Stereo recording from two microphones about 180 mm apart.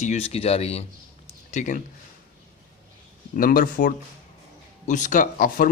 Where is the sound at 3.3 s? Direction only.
50° left (ahead or behind).